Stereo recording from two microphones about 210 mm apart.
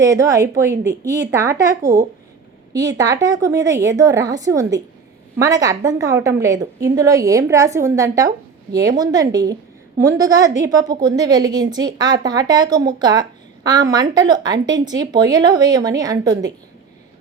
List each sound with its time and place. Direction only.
0.0 s a woman's voice: 15° right (ahead or behind)